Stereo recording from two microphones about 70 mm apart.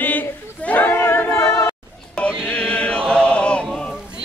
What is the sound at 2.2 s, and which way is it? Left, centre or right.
Music, centre.